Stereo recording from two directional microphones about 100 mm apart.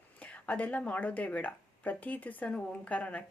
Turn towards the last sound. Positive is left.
turn(degrees=15)  # may be behind; listen again after turning